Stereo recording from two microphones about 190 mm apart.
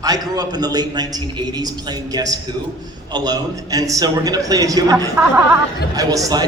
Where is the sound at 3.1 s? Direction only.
20° right (ahead or behind).